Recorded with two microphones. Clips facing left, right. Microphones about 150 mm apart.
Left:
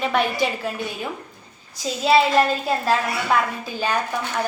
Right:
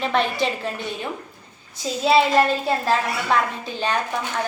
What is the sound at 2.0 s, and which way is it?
A child's voice, centre (ahead or behind).